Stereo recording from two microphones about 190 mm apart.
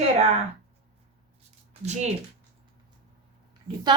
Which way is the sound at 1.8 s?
35° right (ahead or behind).